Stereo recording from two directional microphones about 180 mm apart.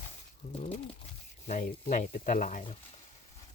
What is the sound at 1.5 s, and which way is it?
Speech, 45° left (ahead or behind).